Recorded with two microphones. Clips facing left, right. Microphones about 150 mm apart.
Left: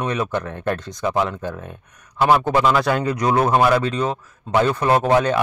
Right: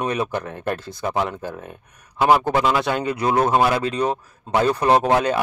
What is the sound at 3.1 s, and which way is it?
Speech, 30° right (ahead or behind).